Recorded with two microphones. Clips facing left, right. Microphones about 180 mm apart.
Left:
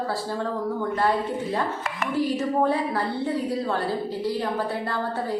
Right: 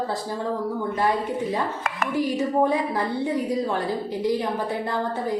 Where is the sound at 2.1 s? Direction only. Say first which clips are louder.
Even; 15° right (ahead or behind).